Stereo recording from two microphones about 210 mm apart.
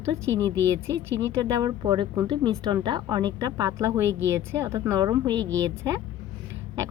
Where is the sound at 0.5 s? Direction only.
60° right (ahead or behind).